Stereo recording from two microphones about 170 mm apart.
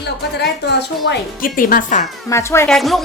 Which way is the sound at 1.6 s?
55° left (ahead or behind).